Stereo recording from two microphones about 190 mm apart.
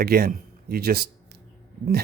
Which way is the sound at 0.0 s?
55° right (ahead or behind).